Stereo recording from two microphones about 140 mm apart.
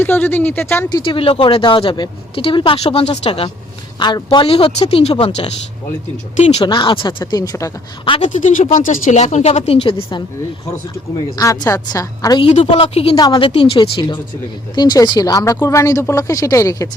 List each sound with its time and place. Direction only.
0.0 s speech: 15° left (ahead or behind)
0.9 s a woman's voice: 40° left (ahead or behind)
6.3 s a woman's voice: 55° left (ahead or behind)
6.6 s a woman's voice: 35° left (ahead or behind)
8.2 s a woman's voice: 60° left (ahead or behind); by 10.2 s 35° left (ahead or behind)
11.3 s speech: 25° left (ahead or behind)
12.4 s a woman's voice: 40° left (ahead or behind)
13.1 s a woman's voice: 30° left (ahead or behind)